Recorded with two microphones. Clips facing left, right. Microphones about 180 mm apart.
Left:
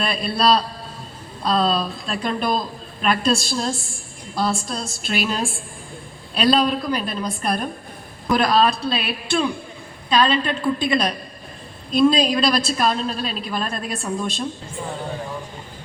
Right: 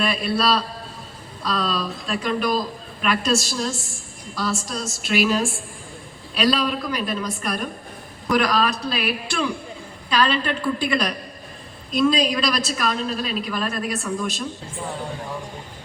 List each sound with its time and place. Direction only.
0.0 s a woman's voice: 35° left (ahead or behind)